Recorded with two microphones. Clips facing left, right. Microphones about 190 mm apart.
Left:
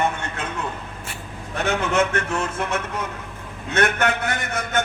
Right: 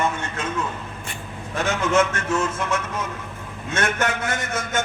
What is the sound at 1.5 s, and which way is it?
A man's voice, 65° left (ahead or behind).